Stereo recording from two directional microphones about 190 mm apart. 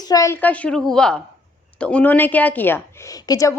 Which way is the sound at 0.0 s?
20° left (ahead or behind).